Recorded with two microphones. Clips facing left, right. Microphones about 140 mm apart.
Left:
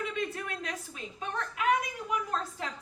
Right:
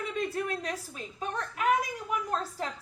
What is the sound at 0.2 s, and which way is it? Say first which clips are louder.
A woman's voice: right 3 dB; 35° right (ahead or behind).